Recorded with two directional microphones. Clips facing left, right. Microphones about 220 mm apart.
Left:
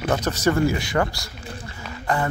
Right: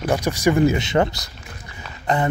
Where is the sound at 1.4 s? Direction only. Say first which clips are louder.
Left 5 dB; 30° left (ahead or behind).